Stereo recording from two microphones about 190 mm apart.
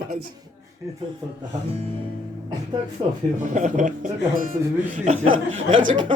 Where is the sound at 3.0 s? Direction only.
25° right (ahead or behind).